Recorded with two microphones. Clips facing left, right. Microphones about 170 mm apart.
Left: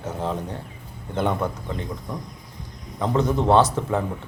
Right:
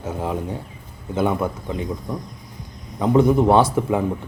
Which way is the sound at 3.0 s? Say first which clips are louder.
Right 6 dB; 10° right (ahead or behind).